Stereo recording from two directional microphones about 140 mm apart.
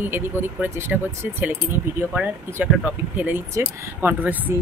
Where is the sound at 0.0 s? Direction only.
15° right (ahead or behind).